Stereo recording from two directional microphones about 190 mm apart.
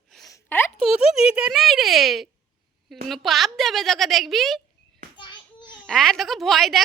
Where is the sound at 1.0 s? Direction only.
5° right (ahead or behind).